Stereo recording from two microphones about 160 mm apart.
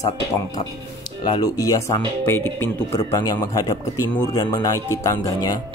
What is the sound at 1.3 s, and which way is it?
A man's voice, 25° left (ahead or behind).